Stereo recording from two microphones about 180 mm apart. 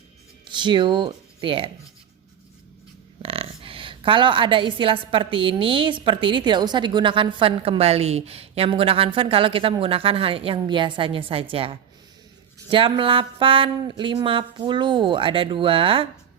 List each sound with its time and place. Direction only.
0.4 s speech: 25° right (ahead or behind)
3.2 s a woman's voice: 30° right (ahead or behind)